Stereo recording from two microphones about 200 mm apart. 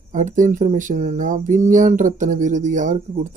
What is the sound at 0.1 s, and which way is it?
Speech, 40° right (ahead or behind).